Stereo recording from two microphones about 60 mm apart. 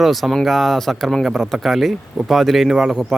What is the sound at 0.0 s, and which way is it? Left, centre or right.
Speech, centre.